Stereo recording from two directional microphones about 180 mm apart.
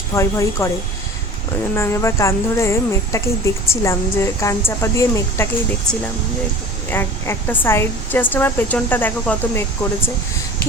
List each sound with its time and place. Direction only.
0.1 s speech: 15° left (ahead or behind)
1.7 s speech: 15° left (ahead or behind)
6.9 s speech: 10° left (ahead or behind)